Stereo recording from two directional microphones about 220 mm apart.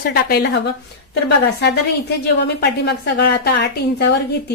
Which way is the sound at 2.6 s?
50° left (ahead or behind).